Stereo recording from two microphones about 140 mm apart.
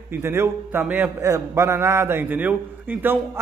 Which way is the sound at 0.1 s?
15° right (ahead or behind).